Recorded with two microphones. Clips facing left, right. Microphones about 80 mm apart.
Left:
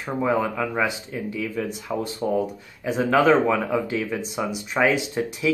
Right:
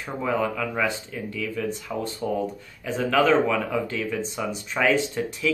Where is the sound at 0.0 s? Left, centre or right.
Centre.